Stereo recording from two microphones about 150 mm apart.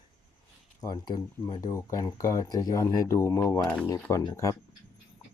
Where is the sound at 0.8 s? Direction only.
25° left (ahead or behind); by 3.9 s 10° left (ahead or behind).